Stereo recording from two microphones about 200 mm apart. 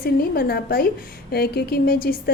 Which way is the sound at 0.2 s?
50° left (ahead or behind).